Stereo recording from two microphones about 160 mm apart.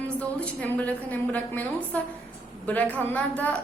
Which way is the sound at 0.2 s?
10° left (ahead or behind).